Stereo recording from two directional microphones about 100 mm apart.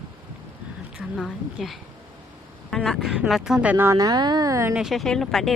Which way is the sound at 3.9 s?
40° right (ahead or behind).